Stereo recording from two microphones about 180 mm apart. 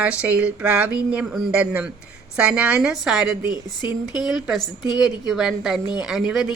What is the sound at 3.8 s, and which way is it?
Speech, 25° left (ahead or behind).